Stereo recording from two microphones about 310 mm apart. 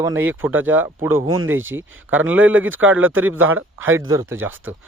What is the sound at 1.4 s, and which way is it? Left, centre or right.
Speech, right.